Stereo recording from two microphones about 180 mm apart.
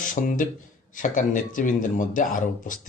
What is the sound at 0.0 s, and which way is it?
A man's voice, 50° left (ahead or behind).